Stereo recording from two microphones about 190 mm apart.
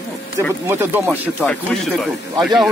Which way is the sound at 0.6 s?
15° right (ahead or behind).